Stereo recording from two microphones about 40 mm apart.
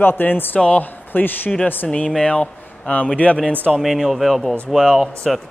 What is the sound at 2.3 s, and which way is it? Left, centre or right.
Speech, left.